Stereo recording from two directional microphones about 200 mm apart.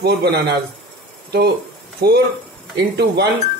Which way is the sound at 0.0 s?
55° right (ahead or behind).